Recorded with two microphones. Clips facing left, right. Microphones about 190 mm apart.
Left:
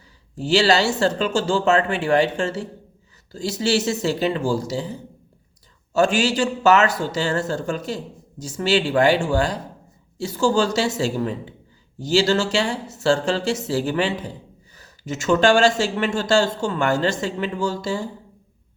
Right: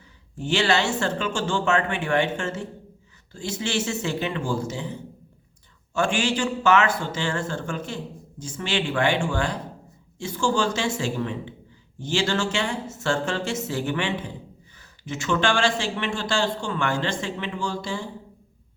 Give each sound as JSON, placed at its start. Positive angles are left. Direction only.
{"t": 0.3, "sound": "speech", "side_deg": 35}